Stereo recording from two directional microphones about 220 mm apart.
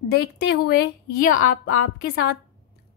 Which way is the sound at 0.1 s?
45° left (ahead or behind).